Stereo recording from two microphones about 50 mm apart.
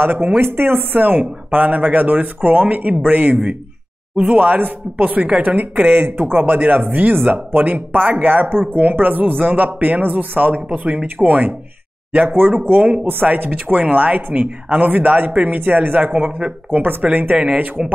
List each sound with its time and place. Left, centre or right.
0.0 s speech: right
4.4 s speech: right
13.5 s speech: right
16.1 s speech: right
17.8 s speech: centre